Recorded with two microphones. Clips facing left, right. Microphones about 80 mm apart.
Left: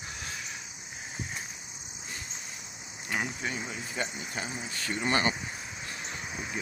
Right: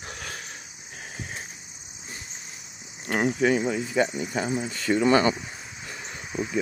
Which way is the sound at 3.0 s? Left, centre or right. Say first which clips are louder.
Right 8 dB; right.